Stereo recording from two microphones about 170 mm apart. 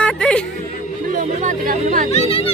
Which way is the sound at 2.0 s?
40° left (ahead or behind).